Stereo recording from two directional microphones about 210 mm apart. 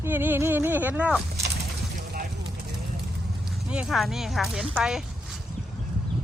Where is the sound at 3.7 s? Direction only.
5° right (ahead or behind).